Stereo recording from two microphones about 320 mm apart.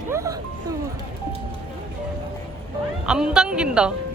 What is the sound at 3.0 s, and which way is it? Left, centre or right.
Speech, centre.